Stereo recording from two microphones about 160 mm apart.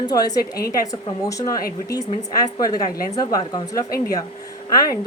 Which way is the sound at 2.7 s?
25° left (ahead or behind).